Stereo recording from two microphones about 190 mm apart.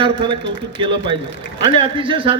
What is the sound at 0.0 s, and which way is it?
A man's voice, 25° right (ahead or behind).